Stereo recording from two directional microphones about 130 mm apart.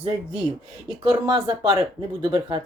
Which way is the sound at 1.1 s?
35° right (ahead or behind).